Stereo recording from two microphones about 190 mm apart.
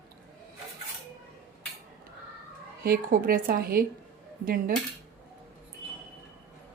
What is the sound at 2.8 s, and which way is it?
Speech, 50° right (ahead or behind).